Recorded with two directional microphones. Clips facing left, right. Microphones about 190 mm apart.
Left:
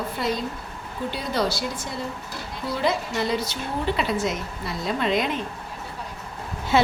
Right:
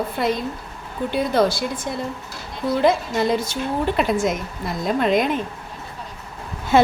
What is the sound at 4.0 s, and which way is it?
A woman's voice, 50° right (ahead or behind).